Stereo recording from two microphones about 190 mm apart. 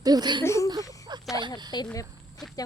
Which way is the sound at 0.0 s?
20° right (ahead or behind).